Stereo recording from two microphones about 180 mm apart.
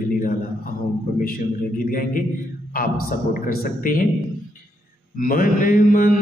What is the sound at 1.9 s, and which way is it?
Mantra, 50° left (ahead or behind).